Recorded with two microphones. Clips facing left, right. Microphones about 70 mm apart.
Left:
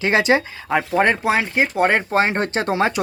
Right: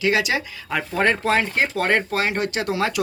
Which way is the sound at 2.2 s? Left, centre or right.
Left.